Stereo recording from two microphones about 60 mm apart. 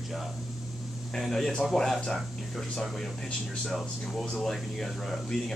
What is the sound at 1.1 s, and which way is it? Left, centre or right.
Speech, centre.